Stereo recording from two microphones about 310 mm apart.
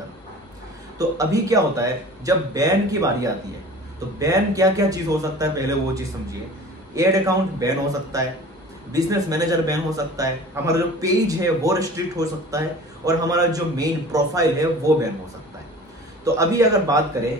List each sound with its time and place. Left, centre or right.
0.9 s a man's voice: centre
7.0 s a man's voice: centre
16.3 s a man's voice: centre